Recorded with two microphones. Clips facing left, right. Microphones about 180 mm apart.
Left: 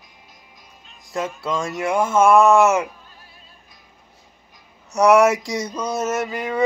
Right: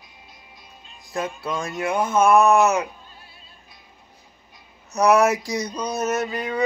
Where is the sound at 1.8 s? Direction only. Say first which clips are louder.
Left 2 dB; 25° left (ahead or behind).